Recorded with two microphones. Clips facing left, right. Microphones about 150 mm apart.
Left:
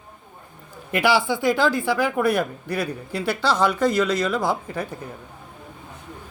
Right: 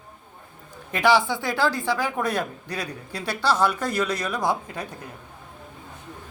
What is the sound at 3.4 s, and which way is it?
Speech, 10° right (ahead or behind).